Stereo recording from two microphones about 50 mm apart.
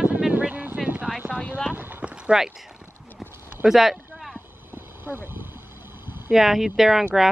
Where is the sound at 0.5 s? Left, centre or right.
Right.